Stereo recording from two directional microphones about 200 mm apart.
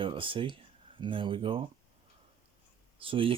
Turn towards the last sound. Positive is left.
turn(degrees=-25)  # may be behind; listen again after turning